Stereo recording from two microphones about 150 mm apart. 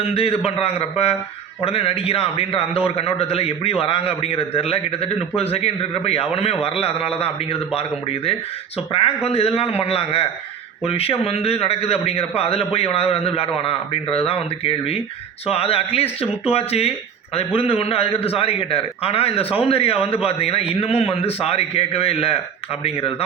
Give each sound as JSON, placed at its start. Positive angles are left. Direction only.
{"t": 0.0, "sound": "a man's voice", "side_deg": 40}